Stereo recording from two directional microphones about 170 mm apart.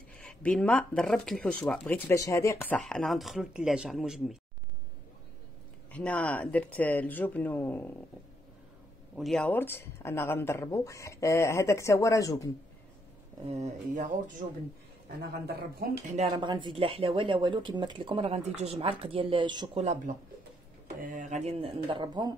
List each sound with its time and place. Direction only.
0.2 s speech: 5° left (ahead or behind)
5.9 s speech: 10° left (ahead or behind)
9.1 s speech: centre (ahead or behind); by 12.4 s 20° left (ahead or behind)
13.5 s speech: 45° right (ahead or behind)
15.4 s speech: 70° right (ahead or behind)
16.2 s speech: 30° right (ahead or behind)
21.0 s speech: 50° right (ahead or behind); by 22.3 s 25° right (ahead or behind)